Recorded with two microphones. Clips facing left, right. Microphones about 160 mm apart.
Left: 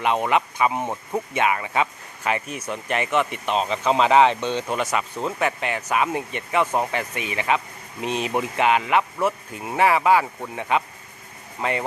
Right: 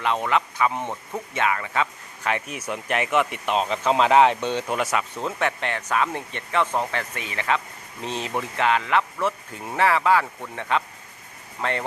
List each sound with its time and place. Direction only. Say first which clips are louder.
0.0 s speech: left 2 dB; 15° left (ahead or behind)
2.2 s speech: left 1 dB; centre (ahead or behind)